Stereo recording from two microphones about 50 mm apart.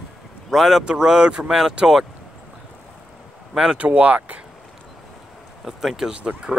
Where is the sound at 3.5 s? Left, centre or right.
Centre.